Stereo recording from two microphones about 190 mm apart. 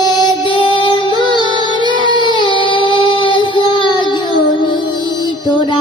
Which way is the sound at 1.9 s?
25° right (ahead or behind).